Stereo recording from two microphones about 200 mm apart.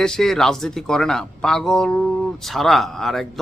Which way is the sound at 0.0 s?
Centre (ahead or behind).